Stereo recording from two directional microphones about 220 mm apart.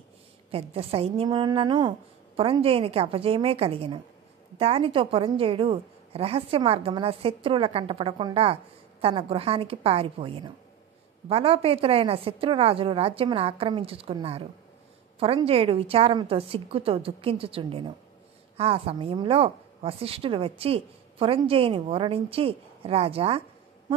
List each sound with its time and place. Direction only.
0.5 s a woman's voice: 25° right (ahead or behind)